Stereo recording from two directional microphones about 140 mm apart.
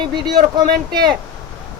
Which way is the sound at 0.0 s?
30° right (ahead or behind).